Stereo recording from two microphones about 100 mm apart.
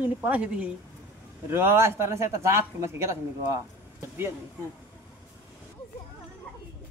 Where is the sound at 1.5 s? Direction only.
25° right (ahead or behind).